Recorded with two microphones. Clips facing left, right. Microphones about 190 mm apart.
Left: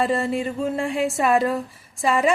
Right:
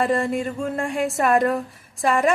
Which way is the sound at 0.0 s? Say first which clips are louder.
Right 1 dB; 5° left (ahead or behind).